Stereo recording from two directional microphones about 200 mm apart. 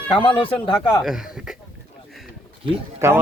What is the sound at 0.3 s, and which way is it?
Speech, 25° left (ahead or behind).